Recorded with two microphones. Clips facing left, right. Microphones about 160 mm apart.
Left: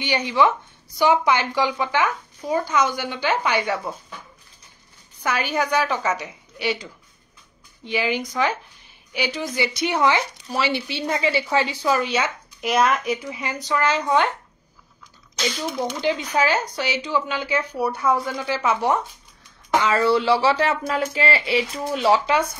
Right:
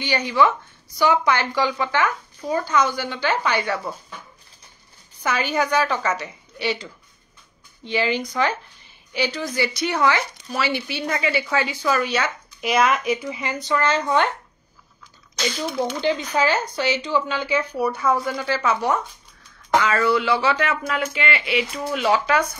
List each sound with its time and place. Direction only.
0.0 s a woman's voice: 20° left (ahead or behind)
5.2 s a woman's voice: centre (ahead or behind); by 12.3 s 20° left (ahead or behind)
12.6 s speech: 5° right (ahead or behind)
13.7 s speech: 10° left (ahead or behind)
15.4 s speech: centre (ahead or behind)
18.4 s a woman's voice: 15° left (ahead or behind)